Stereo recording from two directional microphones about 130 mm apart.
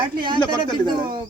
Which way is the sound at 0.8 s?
40° right (ahead or behind).